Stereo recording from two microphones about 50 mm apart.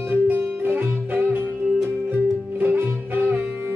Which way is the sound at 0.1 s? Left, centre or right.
Right.